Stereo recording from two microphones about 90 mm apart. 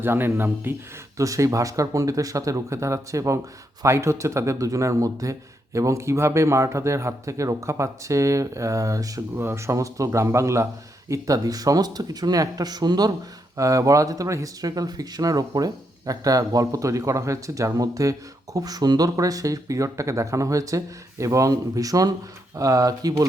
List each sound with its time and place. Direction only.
0.0 s speech: 25° right (ahead or behind)
1.1 s a man's voice: 35° right (ahead or behind)
9.3 s a man's voice: 25° right (ahead or behind); by 13.1 s 50° right (ahead or behind)
13.6 s a man's voice: 40° right (ahead or behind)